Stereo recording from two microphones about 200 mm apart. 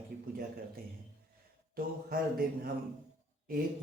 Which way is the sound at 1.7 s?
45° right (ahead or behind).